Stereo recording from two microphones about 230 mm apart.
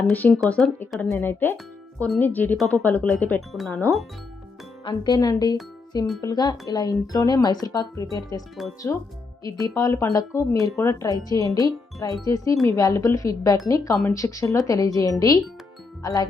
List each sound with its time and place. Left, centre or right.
0.1 s speech: centre
4.9 s speech: centre